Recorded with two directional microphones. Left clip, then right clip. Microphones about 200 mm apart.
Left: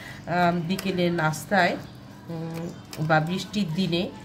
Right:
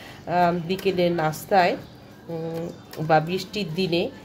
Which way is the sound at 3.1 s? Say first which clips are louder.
Right 3 dB; 20° right (ahead or behind).